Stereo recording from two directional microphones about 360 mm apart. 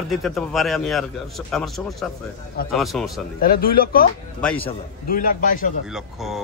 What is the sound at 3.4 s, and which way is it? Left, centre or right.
Speech, left.